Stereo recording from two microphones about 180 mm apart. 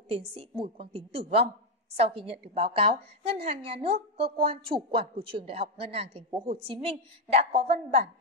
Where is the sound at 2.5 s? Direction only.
30° right (ahead or behind).